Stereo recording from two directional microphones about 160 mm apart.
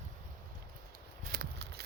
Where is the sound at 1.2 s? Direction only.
65° right (ahead or behind); by 1.8 s 90° right.